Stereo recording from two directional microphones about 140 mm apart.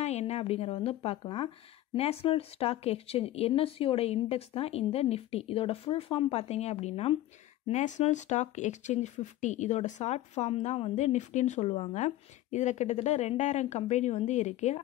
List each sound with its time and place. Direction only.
0.0 s a woman's voice: 50° left (ahead or behind)
7.6 s speech: 55° left (ahead or behind)